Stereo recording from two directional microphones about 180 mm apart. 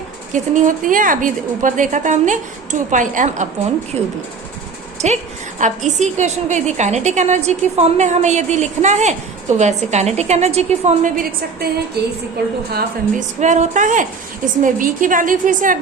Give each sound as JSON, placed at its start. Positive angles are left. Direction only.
{"t": 0.3, "sound": "a woman's voice", "side_deg": -45}
{"t": 13.1, "sound": "a woman's voice", "side_deg": -40}